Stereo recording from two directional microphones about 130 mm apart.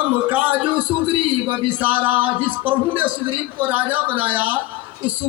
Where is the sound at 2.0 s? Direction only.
15° right (ahead or behind).